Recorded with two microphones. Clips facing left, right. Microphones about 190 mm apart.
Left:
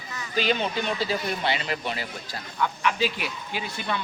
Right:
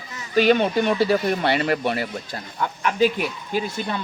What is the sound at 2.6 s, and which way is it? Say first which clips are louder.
Speech: right 5 dB; 45° right (ahead or behind).